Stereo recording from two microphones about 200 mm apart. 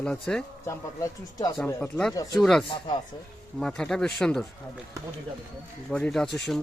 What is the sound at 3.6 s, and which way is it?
Speech, 5° left (ahead or behind).